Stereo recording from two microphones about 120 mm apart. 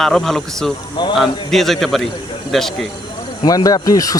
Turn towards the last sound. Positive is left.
turn(degrees=30)  # may be behind; listen again after turning